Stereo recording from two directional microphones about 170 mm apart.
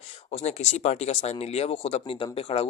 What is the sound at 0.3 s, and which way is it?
Speech, 40° left (ahead or behind).